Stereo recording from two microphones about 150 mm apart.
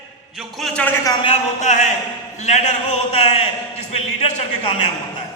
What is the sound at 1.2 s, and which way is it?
A man's voice, 45° left (ahead or behind).